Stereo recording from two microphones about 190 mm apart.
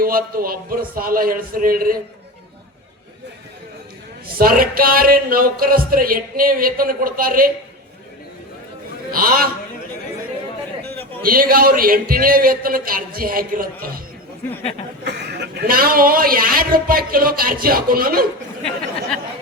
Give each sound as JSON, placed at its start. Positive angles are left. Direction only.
{"t": 0.0, "sound": "a man's voice", "side_deg": -50}
{"t": 4.4, "sound": "a man's voice", "side_deg": -50}
{"t": 9.1, "sound": "a man's voice", "side_deg": -50}
{"t": 11.2, "sound": "a man's voice", "side_deg": -50}
{"t": 15.0, "sound": "a man's voice", "side_deg": -60}